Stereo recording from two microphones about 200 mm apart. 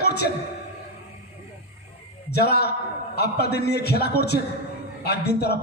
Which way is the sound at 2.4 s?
55° left (ahead or behind).